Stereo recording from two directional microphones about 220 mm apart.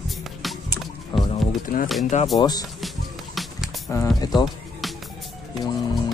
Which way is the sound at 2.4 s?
20° left (ahead or behind).